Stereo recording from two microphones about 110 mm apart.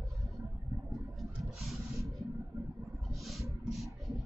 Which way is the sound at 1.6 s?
Centre (ahead or behind).